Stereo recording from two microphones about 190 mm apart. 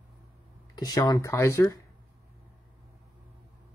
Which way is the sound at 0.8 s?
20° left (ahead or behind).